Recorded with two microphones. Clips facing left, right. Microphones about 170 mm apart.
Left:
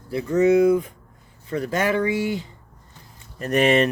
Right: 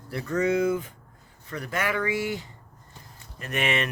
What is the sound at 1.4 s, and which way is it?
Speech, 30° left (ahead or behind).